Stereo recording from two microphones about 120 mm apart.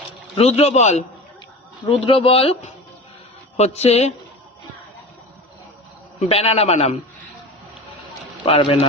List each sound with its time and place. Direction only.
0.3 s a man's voice: 60° left (ahead or behind)
1.8 s a man's voice: 45° left (ahead or behind); by 4.1 s 60° left (ahead or behind)
6.1 s a man's voice: 55° left (ahead or behind)
8.4 s speech: 50° left (ahead or behind)